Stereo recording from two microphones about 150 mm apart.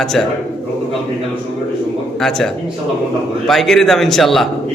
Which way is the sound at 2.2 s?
Centre (ahead or behind).